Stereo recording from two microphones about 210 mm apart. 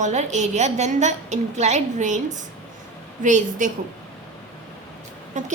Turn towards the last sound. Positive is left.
turn(degrees=-35)  # may be behind; listen again after turning